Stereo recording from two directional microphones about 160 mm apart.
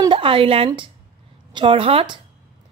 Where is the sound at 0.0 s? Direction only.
30° right (ahead or behind).